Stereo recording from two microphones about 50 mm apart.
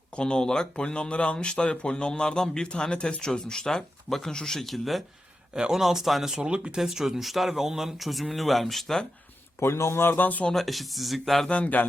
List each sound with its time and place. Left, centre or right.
0.2 s speech: centre
5.5 s speech: centre
9.6 s speech: left
10.5 s speech: centre
11.4 s speech: left